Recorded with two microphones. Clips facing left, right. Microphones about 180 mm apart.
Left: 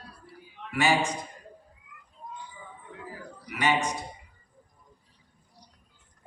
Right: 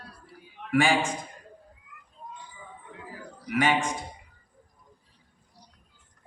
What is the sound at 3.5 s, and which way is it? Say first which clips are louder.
Speech: right 2 dB; 50° right (ahead or behind).